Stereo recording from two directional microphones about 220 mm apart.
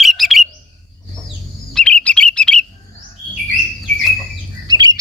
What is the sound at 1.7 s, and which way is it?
Bird, 5° left (ahead or behind).